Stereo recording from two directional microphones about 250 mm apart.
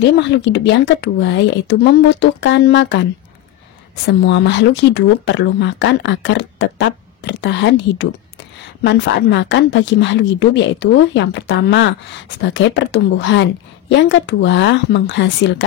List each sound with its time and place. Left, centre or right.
0.0 s speech: left